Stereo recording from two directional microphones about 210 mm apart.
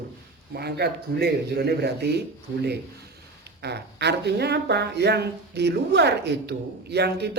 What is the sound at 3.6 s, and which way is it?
Speech, 50° right (ahead or behind).